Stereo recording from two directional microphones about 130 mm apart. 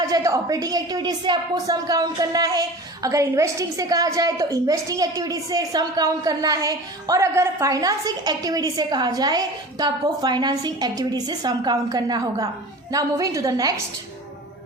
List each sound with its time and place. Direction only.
0.1 s a woman's voice: 30° right (ahead or behind)